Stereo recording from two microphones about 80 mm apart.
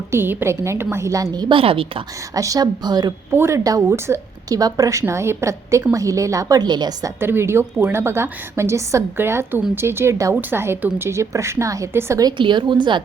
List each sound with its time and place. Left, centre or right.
0.1 s a woman's voice: right
1.4 s a woman's voice: right
2.3 s speech: right
3.3 s a woman's voice: right
3.6 s a woman's voice: right
4.4 s a woman's voice: right
7.2 s a woman's voice: right
12.4 s a woman's voice: right